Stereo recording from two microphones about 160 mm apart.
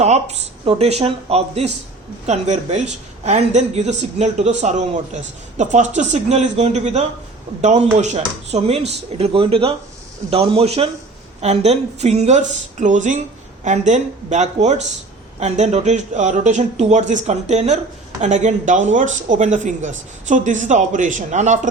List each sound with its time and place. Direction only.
0.0 s a woman's voice: 45° right (ahead or behind)